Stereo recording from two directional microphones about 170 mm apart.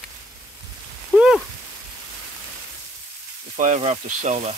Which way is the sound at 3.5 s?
45° right (ahead or behind).